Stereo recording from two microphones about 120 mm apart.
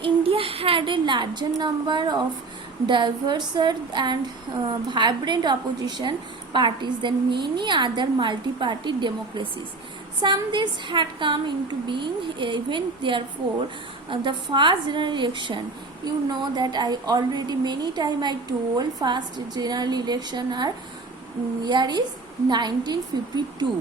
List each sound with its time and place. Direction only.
0.0 s a woman's voice: 50° right (ahead or behind)